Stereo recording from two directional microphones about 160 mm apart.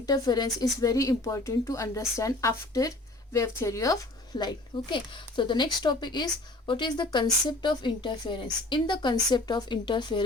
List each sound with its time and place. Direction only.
0.0 s speech: 25° left (ahead or behind)